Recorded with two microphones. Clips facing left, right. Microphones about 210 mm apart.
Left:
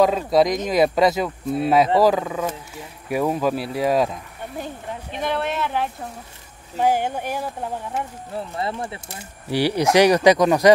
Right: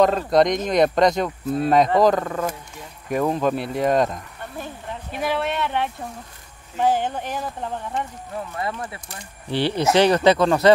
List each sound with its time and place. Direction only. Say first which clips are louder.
0.0 s speech: even; 5° left (ahead or behind)
6.8 s speech: left 1 dB; 10° left (ahead or behind)
8.5 s speech: left 2 dB; 30° left (ahead or behind)
9.5 s speech: left 1 dB; 10° left (ahead or behind)